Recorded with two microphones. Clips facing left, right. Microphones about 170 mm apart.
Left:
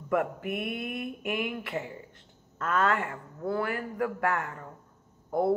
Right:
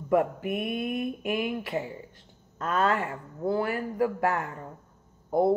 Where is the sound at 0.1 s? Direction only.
25° right (ahead or behind).